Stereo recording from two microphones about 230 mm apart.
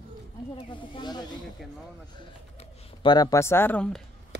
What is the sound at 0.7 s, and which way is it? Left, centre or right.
Speech, centre.